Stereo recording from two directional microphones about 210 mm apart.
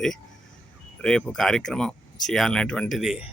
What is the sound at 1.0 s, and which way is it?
A man's voice, 5° left (ahead or behind).